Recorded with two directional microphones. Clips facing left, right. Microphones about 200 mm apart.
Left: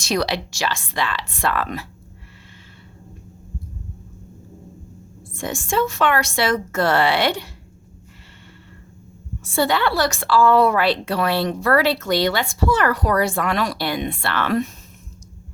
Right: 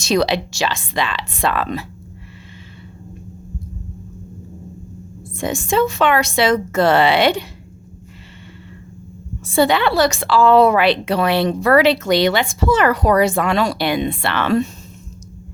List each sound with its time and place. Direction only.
0.0 s speech: 25° right (ahead or behind)
5.3 s speech: 20° right (ahead or behind)
9.6 s speech: 20° right (ahead or behind)